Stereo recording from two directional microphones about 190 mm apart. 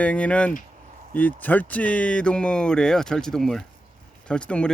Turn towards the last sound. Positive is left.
turn(degrees=5)  # may be behind; listen again after turning